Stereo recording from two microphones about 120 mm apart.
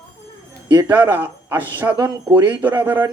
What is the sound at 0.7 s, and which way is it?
Speech, 35° right (ahead or behind).